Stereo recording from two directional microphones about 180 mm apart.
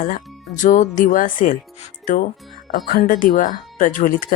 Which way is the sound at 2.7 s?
50° left (ahead or behind).